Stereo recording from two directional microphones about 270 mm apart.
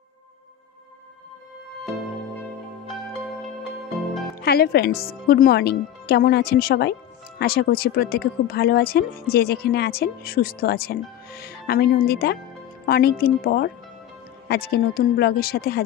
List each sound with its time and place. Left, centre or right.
3.4 s music: centre
4.4 s speech: left